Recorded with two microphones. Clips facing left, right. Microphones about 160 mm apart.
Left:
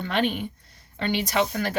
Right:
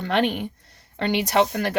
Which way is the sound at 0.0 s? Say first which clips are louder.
Right 3 dB; 60° right (ahead or behind).